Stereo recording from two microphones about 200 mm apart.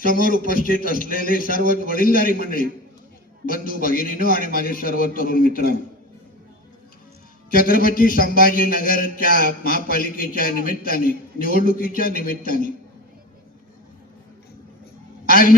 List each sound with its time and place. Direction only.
0.0 s a man's voice: 45° left (ahead or behind)
7.5 s a man's voice: 45° left (ahead or behind)
15.3 s a man's voice: 45° left (ahead or behind)